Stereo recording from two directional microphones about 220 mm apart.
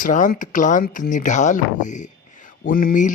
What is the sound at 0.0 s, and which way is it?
Speech, 35° left (ahead or behind).